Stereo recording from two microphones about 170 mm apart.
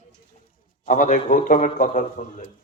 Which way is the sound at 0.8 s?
50° left (ahead or behind).